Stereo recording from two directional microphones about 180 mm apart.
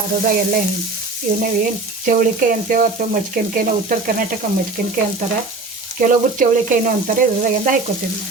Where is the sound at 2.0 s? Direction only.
50° right (ahead or behind).